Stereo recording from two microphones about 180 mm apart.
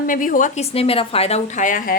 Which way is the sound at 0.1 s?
50° left (ahead or behind).